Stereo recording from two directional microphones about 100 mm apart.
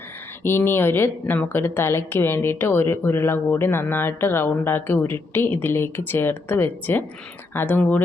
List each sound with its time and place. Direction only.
0.4 s a woman's voice: 20° left (ahead or behind)